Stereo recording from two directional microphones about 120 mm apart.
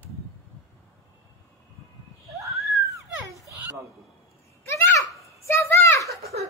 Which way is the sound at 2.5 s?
Centre (ahead or behind).